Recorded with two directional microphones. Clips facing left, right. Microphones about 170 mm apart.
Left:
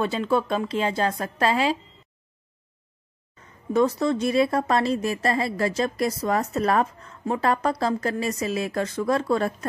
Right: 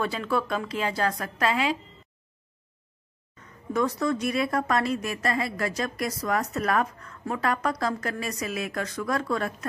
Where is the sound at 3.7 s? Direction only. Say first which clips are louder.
Left 4 dB; 25° left (ahead or behind).